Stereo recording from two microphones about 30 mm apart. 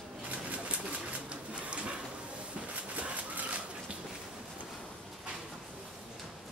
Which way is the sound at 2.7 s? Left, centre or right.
Right.